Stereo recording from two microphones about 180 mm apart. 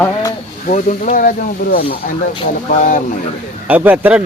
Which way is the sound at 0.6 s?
45° left (ahead or behind).